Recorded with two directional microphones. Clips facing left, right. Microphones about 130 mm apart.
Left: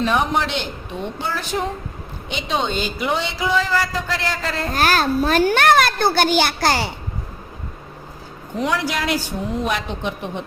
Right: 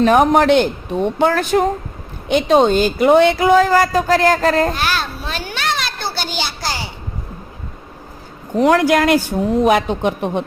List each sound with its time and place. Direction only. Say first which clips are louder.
0.0 s a woman's voice: right 8 dB; 50° right (ahead or behind)
2.3 s speech: right 11 dB; 45° right (ahead or behind)
4.7 s a child's voice: left 3 dB; 45° left (ahead or behind)
8.6 s speech: right 9 dB; 50° right (ahead or behind)